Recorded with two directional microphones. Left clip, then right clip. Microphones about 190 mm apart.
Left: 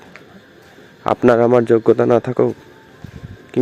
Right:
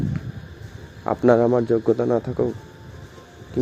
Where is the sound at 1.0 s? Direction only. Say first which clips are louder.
Left 4 dB; 15° left (ahead or behind).